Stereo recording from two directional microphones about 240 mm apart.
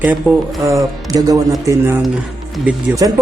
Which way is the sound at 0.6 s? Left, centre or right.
Centre.